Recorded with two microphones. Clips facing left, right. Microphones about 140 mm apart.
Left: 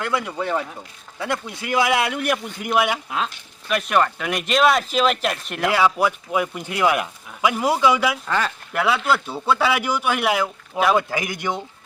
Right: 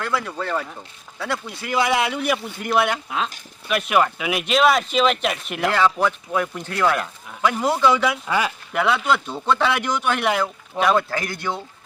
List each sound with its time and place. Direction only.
0.2 s speech: 10° left (ahead or behind)
2.6 s speech: 10° left (ahead or behind)
3.7 s speech: centre (ahead or behind)
5.7 s speech: 10° left (ahead or behind)
8.3 s speech: 10° right (ahead or behind)
8.7 s speech: centre (ahead or behind)